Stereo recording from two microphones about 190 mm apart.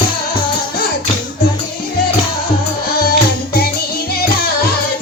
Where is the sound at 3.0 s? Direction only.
55° left (ahead or behind).